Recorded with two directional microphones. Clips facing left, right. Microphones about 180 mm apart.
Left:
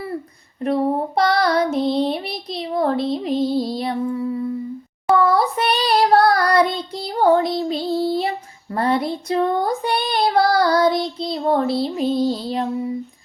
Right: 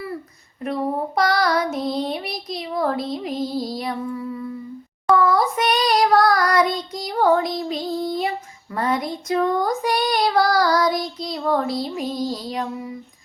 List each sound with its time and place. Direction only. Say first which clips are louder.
0.6 s child singing: left 4 dB; 30° left (ahead or behind)